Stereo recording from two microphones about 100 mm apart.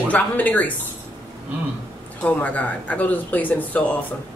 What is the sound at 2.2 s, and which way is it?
Speech, 15° left (ahead or behind).